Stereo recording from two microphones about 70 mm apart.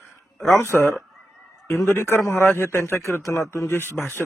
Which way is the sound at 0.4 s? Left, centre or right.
Left.